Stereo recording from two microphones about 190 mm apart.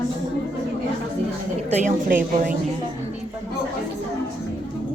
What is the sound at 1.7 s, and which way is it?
Speech, 45° right (ahead or behind).